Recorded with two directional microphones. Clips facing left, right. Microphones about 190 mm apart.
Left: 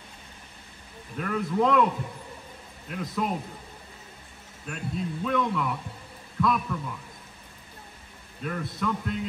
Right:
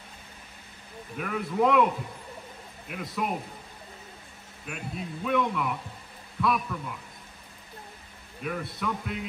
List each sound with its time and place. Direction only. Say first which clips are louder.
1.1 s speech: left 2 dB; 5° right (ahead or behind)
2.9 s speech: left 2 dB; 5° right (ahead or behind)
4.6 s a man's voice: left 4 dB; 5° right (ahead or behind)
8.4 s speech: left 2 dB; 5° right (ahead or behind)